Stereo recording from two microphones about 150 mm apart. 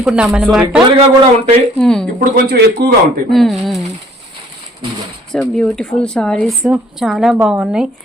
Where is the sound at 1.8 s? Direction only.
5° left (ahead or behind).